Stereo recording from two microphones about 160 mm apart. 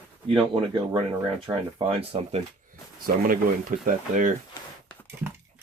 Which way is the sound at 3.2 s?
60° right (ahead or behind).